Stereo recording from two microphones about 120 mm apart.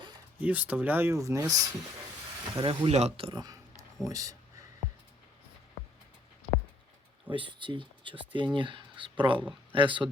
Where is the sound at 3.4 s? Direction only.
30° right (ahead or behind).